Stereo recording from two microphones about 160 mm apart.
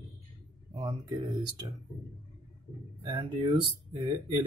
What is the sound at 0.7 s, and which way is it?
Speech, 25° right (ahead or behind).